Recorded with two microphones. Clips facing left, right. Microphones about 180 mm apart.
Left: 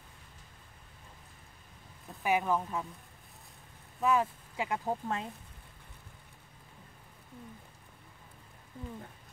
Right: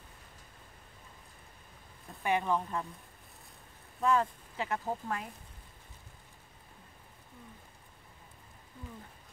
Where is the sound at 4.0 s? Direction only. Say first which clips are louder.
Even; 5° left (ahead or behind).